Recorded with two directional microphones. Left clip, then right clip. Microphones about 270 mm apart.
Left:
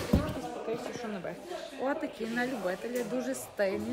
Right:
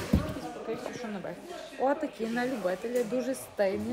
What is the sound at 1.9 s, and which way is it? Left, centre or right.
Speech, centre.